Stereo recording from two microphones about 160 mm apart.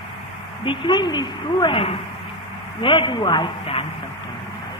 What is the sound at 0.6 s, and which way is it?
Speech, 30° left (ahead or behind).